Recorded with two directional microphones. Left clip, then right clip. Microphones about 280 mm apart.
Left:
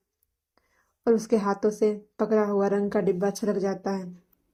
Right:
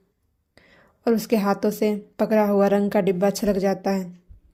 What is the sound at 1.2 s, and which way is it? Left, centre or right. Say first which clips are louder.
Speech: right 2 dB; right.